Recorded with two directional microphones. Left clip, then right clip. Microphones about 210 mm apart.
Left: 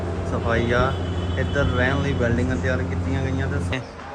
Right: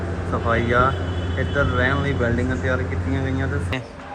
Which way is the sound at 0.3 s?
Centre (ahead or behind).